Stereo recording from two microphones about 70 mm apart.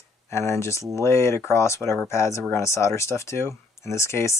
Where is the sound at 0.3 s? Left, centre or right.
Left.